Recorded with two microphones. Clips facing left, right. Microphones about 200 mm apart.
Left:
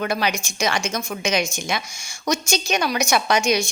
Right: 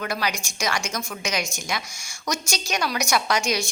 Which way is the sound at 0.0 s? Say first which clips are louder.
Left 4 dB; 25° left (ahead or behind).